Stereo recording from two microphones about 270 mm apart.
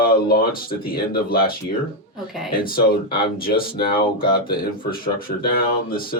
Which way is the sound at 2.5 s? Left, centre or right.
Left.